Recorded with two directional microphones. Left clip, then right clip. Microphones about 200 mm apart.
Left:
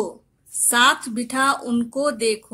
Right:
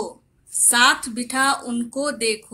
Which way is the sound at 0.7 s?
50° left (ahead or behind).